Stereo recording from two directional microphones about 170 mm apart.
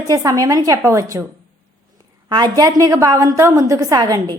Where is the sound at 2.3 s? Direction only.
25° right (ahead or behind).